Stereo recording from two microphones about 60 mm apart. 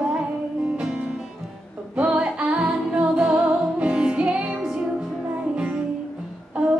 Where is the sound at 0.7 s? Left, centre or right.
Centre.